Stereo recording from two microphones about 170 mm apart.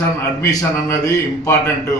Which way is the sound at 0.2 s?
15° left (ahead or behind).